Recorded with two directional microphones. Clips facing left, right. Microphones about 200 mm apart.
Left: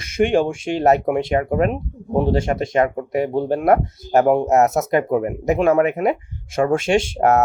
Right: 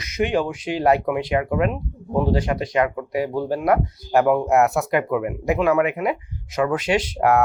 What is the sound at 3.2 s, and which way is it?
Speech, 25° left (ahead or behind).